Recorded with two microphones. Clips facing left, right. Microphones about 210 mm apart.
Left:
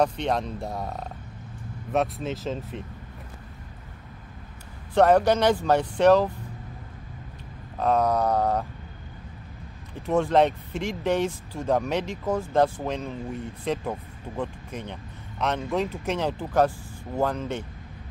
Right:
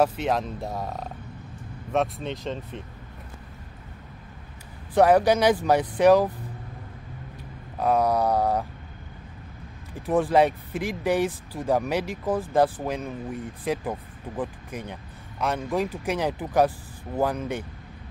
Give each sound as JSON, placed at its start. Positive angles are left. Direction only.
{"t": 0.0, "sound": "speech", "side_deg": -5}
{"t": 4.9, "sound": "speech", "side_deg": -10}
{"t": 7.7, "sound": "speech", "side_deg": -10}
{"t": 10.0, "sound": "speech", "side_deg": -15}